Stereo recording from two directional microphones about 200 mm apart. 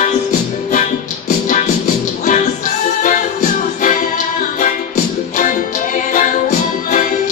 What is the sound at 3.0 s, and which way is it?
Music, 40° left (ahead or behind).